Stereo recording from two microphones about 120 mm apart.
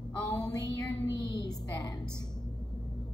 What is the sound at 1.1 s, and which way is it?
Music, 40° left (ahead or behind).